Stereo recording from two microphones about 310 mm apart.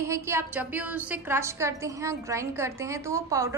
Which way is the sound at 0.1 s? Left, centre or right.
Centre.